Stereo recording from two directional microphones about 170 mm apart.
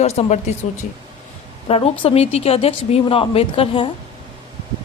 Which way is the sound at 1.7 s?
35° left (ahead or behind).